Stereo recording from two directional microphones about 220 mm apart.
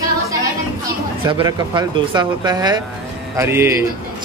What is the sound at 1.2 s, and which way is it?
Speech, 20° right (ahead or behind).